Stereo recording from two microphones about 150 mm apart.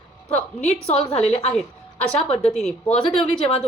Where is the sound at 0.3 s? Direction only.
50° left (ahead or behind).